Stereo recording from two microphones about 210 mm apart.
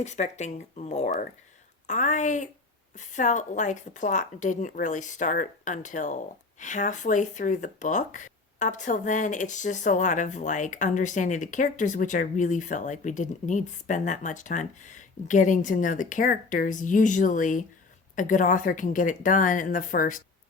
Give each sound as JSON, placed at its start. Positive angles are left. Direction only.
{"t": 0.0, "sound": "speech", "side_deg": 35}